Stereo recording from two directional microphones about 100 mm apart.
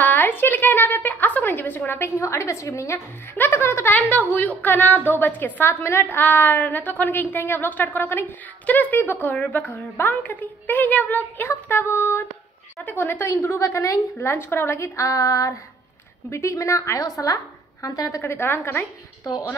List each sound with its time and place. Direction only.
0.0 s a woman's voice: 20° left (ahead or behind); by 18.2 s 35° left (ahead or behind)
18.2 s a woman's voice: 25° left (ahead or behind)